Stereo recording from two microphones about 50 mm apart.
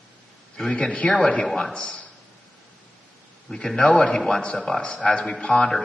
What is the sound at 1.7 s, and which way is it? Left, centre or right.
Speech, left.